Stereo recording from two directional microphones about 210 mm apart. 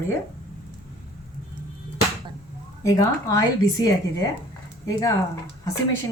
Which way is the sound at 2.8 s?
15° left (ahead or behind).